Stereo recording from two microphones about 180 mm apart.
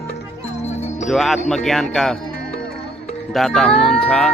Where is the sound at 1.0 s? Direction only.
Centre (ahead or behind).